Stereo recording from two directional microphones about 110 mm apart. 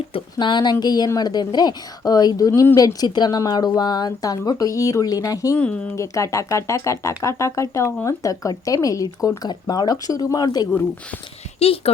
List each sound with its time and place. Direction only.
0.3 s a woman's voice: 40° left (ahead or behind)
5.5 s speech: 10° left (ahead or behind)
6.0 s a woman's voice: 25° left (ahead or behind)
11.6 s a woman's voice: 65° left (ahead or behind)